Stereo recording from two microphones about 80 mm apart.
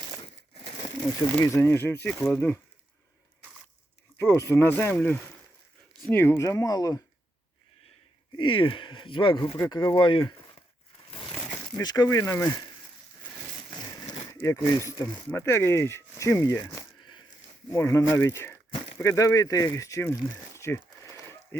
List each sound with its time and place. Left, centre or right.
1.4 s speech: left
4.2 s speech: left
6.1 s speech: left
6.3 s speech: left
8.4 s speech: left
9.6 s speech: left
11.7 s speech: left
12.1 s speech: left
14.3 s speech: left
17.0 s a sound: left
17.7 s speech: left
20.6 s a sound: left